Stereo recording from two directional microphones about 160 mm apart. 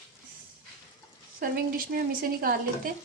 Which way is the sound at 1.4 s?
60° right (ahead or behind).